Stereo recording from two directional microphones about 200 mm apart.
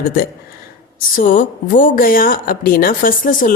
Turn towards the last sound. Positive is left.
turn(degrees=40)  # may be behind; listen again after turning